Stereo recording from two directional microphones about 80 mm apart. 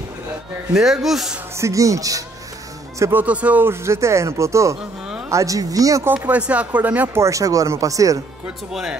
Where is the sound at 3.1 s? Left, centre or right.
Centre.